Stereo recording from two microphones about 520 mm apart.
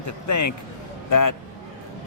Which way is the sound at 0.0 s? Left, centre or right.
Left.